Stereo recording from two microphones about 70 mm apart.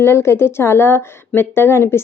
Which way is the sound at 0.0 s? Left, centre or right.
Left.